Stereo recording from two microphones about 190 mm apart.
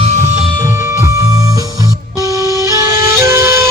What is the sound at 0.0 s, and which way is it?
Music, 40° right (ahead or behind).